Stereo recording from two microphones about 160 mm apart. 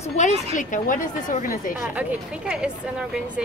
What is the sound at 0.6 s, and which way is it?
A woman's voice, 55° left (ahead or behind).